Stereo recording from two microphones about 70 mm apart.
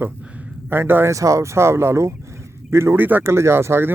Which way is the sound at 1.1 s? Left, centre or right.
Right.